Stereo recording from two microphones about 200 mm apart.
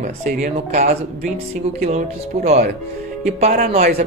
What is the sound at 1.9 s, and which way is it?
A man's voice, 35° right (ahead or behind).